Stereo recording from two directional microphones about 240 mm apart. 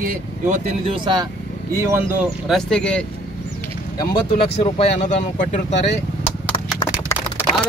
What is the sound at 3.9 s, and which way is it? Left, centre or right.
Speech, left.